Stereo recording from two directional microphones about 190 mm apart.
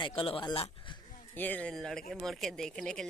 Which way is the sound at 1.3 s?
10° left (ahead or behind).